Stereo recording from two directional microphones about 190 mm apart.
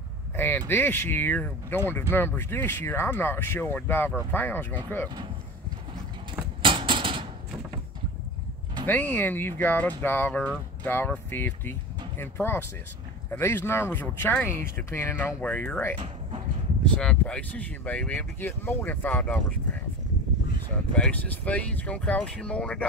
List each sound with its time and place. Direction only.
0.4 s speech: 10° left (ahead or behind)
6.6 s a sound: 25° right (ahead or behind)
8.8 s speech: 10° left (ahead or behind)
20.9 s speech: 5° left (ahead or behind)